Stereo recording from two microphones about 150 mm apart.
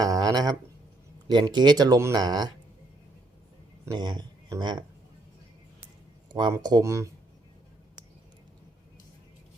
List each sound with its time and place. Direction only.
0.0 s speech: 25° right (ahead or behind)
3.8 s speech: 30° right (ahead or behind)
6.3 s speech: 30° right (ahead or behind)